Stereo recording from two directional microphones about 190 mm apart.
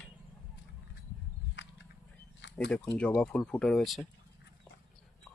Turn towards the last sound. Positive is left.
turn(degrees=0)  # may be behind; listen again after turning